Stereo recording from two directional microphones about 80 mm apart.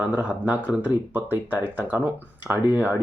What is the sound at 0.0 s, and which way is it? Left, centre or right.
Speech, centre.